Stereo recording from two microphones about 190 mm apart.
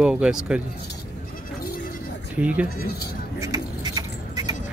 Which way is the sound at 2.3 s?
5° right (ahead or behind).